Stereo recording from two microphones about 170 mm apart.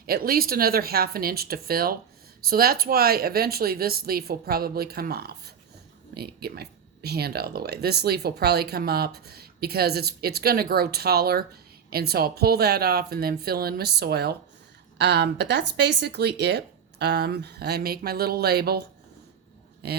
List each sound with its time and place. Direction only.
0.0 s speech: 60° right (ahead or behind)
14.9 s speech: 85° right